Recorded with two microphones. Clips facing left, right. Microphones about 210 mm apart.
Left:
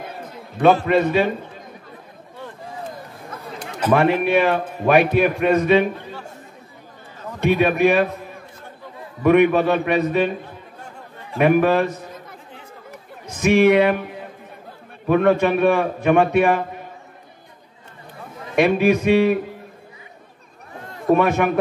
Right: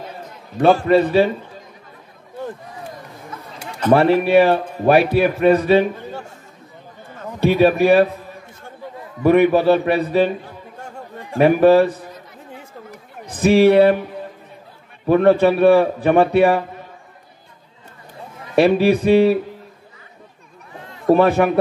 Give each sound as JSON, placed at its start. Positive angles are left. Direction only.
{"t": 0.6, "sound": "a man's voice", "side_deg": -35}
{"t": 3.9, "sound": "a man's voice", "side_deg": -30}
{"t": 7.3, "sound": "a man's voice", "side_deg": -30}
{"t": 9.2, "sound": "a man's voice", "side_deg": -35}
{"t": 11.3, "sound": "a man's voice", "side_deg": -35}
{"t": 13.3, "sound": "a man's voice", "side_deg": -35}
{"t": 15.0, "sound": "a man's voice", "side_deg": -35}
{"t": 18.5, "sound": "a man's voice", "side_deg": -35}
{"t": 21.1, "sound": "a man's voice", "side_deg": -35}